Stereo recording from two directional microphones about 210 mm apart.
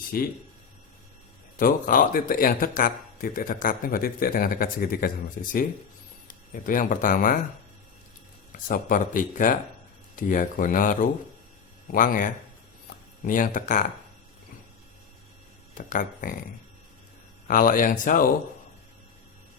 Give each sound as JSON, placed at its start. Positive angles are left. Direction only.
{"t": 1.5, "sound": "speech", "side_deg": 40}
{"t": 8.5, "sound": "speech", "side_deg": 40}
{"t": 15.9, "sound": "speech", "side_deg": 40}
{"t": 17.5, "sound": "speech", "side_deg": 40}